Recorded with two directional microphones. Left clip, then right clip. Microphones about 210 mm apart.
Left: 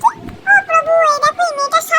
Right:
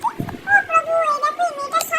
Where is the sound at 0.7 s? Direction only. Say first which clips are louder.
Left 6 dB; 45° left (ahead or behind).